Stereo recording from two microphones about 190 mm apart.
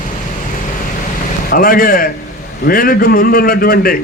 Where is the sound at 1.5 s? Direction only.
50° left (ahead or behind).